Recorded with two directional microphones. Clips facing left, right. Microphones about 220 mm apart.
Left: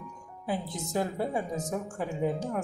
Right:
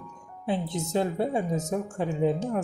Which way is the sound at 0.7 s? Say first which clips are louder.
Right 4 dB; 25° right (ahead or behind).